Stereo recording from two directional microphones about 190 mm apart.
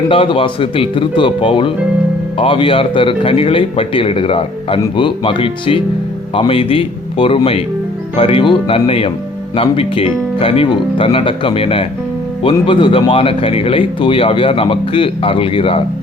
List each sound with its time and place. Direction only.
0.1 s speech: 25° left (ahead or behind)